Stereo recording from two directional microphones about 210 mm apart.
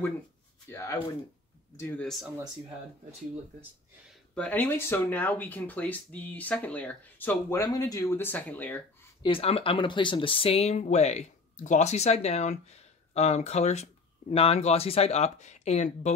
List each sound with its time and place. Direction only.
0.7 s speech: 10° left (ahead or behind)
4.1 s speech: 5° left (ahead or behind)
9.2 s speech: 25° left (ahead or behind)